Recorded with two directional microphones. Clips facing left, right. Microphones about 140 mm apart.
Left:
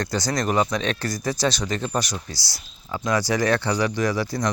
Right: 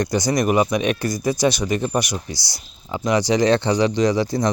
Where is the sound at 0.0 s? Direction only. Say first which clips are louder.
Right 5 dB; 15° right (ahead or behind).